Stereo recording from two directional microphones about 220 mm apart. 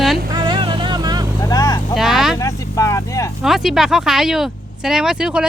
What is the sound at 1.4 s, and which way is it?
Vehicle, 15° left (ahead or behind).